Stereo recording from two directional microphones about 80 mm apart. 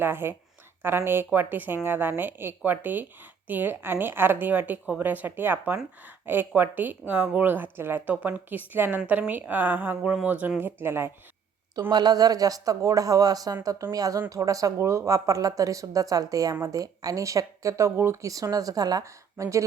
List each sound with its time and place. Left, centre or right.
0.0 s a woman's voice: right
11.9 s speech: right